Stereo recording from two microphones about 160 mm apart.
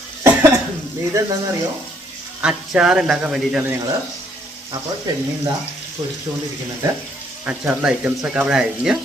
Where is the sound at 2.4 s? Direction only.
5° right (ahead or behind).